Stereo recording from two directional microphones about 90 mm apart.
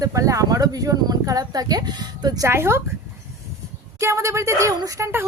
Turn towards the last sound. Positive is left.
turn(degrees=-40)  # may be behind; listen again after turning